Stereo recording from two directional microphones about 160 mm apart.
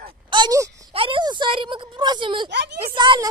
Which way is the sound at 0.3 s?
25° right (ahead or behind).